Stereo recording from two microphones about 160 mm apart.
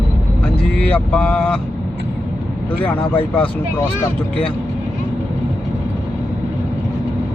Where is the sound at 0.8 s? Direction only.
10° left (ahead or behind).